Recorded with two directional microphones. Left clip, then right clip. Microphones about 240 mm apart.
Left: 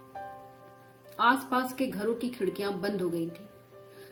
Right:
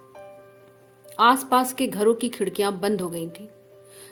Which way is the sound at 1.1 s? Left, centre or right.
Right.